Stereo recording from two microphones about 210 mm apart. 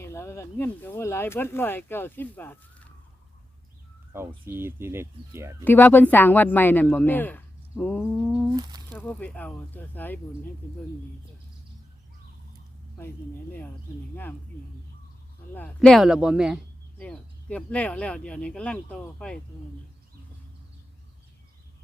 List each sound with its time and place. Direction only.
0.0 s speech: 10° left (ahead or behind)
4.4 s speech: 10° right (ahead or behind)
5.6 s speech: 10° left (ahead or behind)
8.5 s speech: 20° right (ahead or behind)
8.9 s speech: 5° left (ahead or behind)
13.0 s speech: 10° left (ahead or behind)
15.5 s speech: 5° left (ahead or behind)